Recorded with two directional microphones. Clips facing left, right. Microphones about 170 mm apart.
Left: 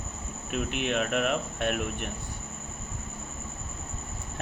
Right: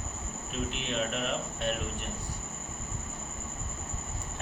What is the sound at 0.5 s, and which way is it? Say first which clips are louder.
Speech: left 5 dB; 65° left (ahead or behind).